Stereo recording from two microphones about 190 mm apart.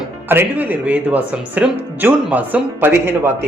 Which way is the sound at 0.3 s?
10° right (ahead or behind).